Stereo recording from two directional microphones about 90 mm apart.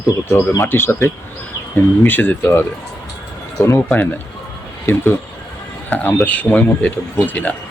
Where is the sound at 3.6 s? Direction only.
25° left (ahead or behind).